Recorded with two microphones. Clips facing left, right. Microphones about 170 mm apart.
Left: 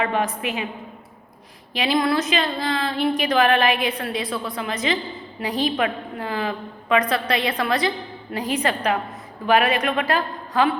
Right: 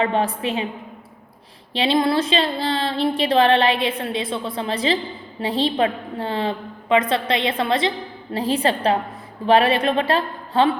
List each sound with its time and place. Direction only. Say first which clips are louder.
0.0 s a woman's voice: right 2 dB; 30° right (ahead or behind)
1.7 s a woman's voice: right 2 dB; 30° right (ahead or behind)